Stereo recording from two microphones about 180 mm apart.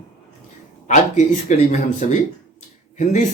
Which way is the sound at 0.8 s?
40° left (ahead or behind).